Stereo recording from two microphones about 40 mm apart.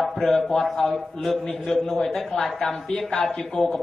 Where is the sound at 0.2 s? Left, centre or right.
Centre.